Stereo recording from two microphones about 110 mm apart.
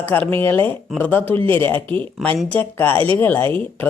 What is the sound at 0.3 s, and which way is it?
Speech, 20° left (ahead or behind).